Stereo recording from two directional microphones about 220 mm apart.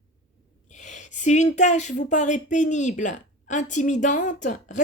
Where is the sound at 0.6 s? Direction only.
35° left (ahead or behind).